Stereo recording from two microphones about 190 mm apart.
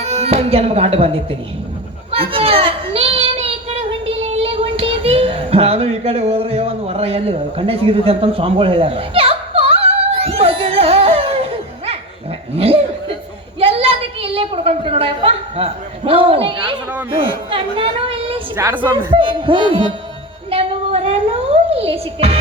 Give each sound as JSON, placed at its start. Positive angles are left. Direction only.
{"t": 0.0, "sound": "speech", "side_deg": -35}
{"t": 2.0, "sound": "child singing", "side_deg": -30}
{"t": 12.5, "sound": "chuckle", "side_deg": -30}
{"t": 13.6, "sound": "a sound", "side_deg": -30}
{"t": 17.2, "sound": "a woman's voice", "side_deg": -30}
{"t": 18.5, "sound": "a woman's voice", "side_deg": -10}
{"t": 18.8, "sound": "speech", "side_deg": -25}
{"t": 20.5, "sound": "music", "side_deg": -30}